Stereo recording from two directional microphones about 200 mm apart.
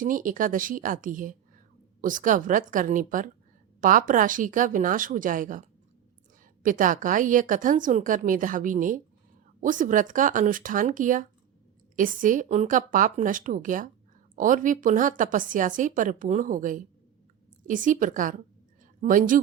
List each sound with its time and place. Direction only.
0.0 s a woman's voice: 40° right (ahead or behind)